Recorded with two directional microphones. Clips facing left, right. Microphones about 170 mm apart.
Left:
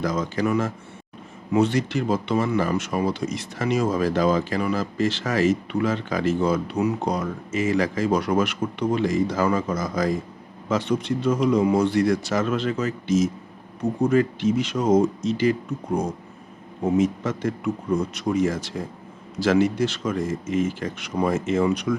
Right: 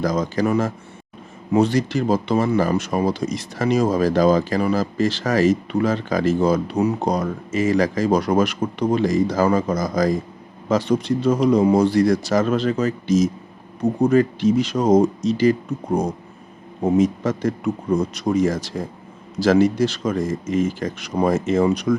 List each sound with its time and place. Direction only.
0.0 s speech: 40° right (ahead or behind)